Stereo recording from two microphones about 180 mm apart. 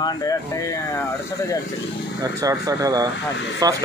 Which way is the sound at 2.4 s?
20° right (ahead or behind).